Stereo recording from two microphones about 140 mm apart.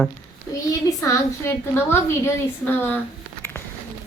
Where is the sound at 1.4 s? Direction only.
15° left (ahead or behind).